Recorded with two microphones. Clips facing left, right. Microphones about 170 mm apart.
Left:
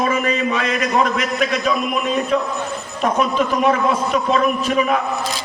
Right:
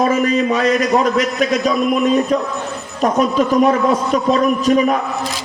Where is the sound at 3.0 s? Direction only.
40° right (ahead or behind).